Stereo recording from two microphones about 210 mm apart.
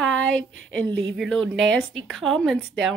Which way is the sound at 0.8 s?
55° right (ahead or behind).